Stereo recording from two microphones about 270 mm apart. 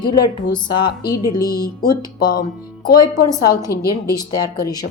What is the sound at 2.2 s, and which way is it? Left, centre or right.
Speech, left.